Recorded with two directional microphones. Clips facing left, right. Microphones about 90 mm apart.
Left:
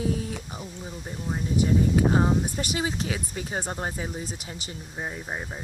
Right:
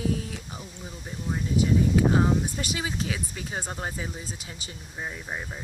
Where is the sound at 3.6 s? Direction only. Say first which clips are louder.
Left 1 dB; 20° left (ahead or behind).